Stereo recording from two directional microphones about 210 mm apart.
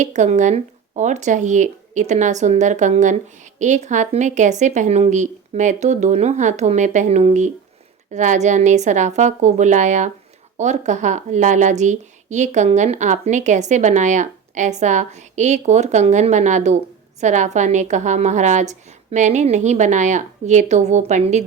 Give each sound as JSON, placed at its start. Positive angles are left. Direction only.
{"t": 0.0, "sound": "speech", "side_deg": -35}